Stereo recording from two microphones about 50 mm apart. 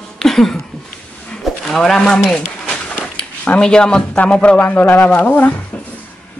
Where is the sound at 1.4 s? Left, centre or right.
Centre.